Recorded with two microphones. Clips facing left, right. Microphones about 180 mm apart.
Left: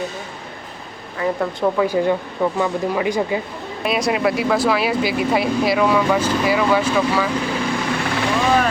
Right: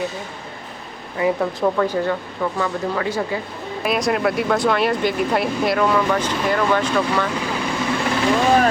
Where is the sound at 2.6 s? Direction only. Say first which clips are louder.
Left 2 dB; 15° left (ahead or behind).